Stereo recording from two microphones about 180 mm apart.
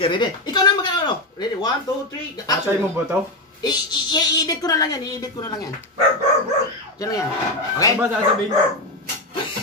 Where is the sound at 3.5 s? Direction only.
25° left (ahead or behind).